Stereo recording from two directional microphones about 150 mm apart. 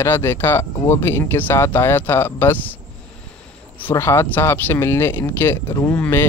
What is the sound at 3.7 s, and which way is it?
Speech, 15° left (ahead or behind).